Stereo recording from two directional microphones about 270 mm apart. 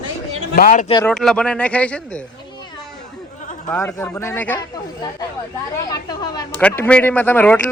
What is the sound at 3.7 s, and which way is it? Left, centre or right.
Speech, centre.